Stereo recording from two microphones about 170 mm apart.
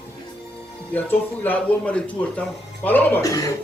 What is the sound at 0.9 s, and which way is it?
Speech, 10° left (ahead or behind).